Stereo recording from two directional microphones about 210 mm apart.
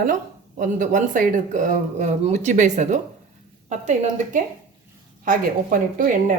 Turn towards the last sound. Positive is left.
turn(degrees=-40)  # may be behind; listen again after turning